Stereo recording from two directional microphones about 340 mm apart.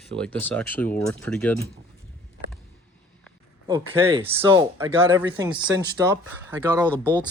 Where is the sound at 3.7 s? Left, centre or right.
Centre.